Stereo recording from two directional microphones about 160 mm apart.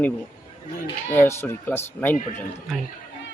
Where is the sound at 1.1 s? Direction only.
15° left (ahead or behind).